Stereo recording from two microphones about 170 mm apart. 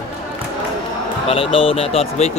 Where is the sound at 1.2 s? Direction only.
35° left (ahead or behind).